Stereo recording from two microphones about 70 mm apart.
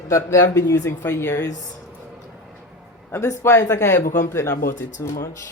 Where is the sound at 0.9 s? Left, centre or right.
Left.